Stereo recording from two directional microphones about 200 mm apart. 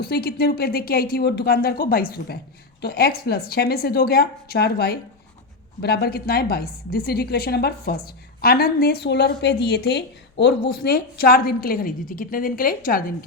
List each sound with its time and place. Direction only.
0.0 s a woman's voice: 50° left (ahead or behind)